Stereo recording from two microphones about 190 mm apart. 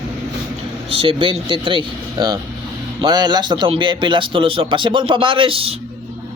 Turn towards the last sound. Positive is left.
turn(degrees=-30)  # may be behind; listen again after turning